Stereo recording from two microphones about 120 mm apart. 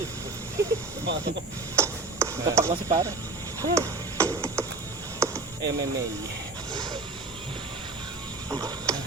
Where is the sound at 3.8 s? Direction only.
25° right (ahead or behind).